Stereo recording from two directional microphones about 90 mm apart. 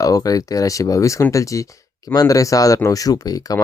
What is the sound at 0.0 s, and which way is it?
Speech, 40° left (ahead or behind).